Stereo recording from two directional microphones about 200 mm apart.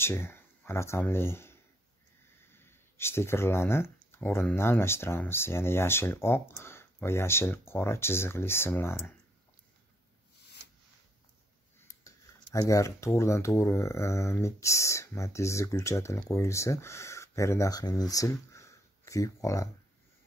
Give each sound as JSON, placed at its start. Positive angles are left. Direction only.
{"t": 0.0, "sound": "speech", "side_deg": 10}
{"t": 11.9, "sound": "speech", "side_deg": 20}
{"t": 18.1, "sound": "a sound", "side_deg": 15}